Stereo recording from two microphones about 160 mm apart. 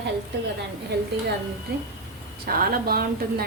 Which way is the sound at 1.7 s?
75° right (ahead or behind).